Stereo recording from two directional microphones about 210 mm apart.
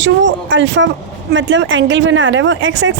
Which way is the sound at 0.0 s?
60° right (ahead or behind).